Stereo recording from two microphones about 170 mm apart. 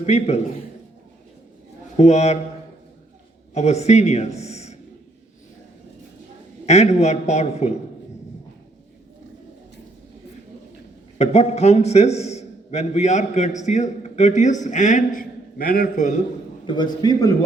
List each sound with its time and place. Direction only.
0.0 s a man's voice: 40° left (ahead or behind)
2.0 s a man's voice: 40° left (ahead or behind)
3.5 s a man's voice: 40° left (ahead or behind)
4.4 s a sound: 40° left (ahead or behind)
6.7 s a man's voice: 40° left (ahead or behind)
11.2 s a man's voice: 40° left (ahead or behind)
16.6 s a man's voice: 25° left (ahead or behind)